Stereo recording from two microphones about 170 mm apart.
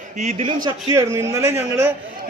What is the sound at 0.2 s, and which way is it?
Speech, 40° right (ahead or behind).